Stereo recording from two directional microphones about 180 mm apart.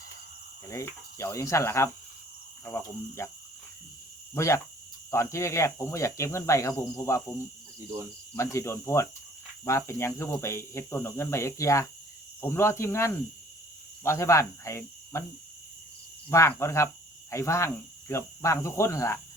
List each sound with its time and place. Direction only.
0.7 s speech: 15° left (ahead or behind)
4.4 s speech: 15° left (ahead or behind)
8.4 s speech: 15° left (ahead or behind)
14.0 s cricket: 15° left (ahead or behind)
16.3 s speech: 15° left (ahead or behind)